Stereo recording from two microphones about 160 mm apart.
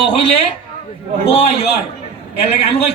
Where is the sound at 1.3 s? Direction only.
40° left (ahead or behind).